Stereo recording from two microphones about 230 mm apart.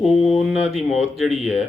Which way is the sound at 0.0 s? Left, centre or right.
Centre.